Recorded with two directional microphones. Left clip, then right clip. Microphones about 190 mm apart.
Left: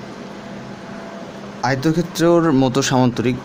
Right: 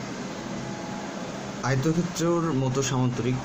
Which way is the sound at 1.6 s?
50° left (ahead or behind).